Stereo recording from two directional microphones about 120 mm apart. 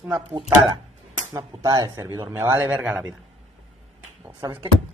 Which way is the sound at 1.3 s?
35° right (ahead or behind).